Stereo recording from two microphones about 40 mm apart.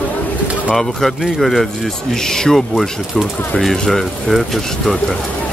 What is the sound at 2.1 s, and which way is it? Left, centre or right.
Speech, centre.